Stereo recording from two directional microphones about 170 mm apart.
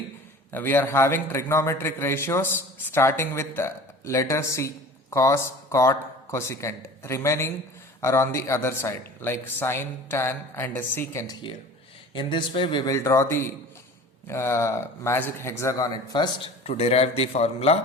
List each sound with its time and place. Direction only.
0.5 s a man's voice: 10° left (ahead or behind)
12.1 s a man's voice: 30° left (ahead or behind)
16.6 s a man's voice: 35° left (ahead or behind)